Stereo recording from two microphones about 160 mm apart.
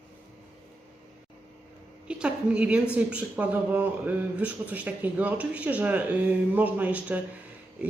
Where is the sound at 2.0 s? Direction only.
5° right (ahead or behind).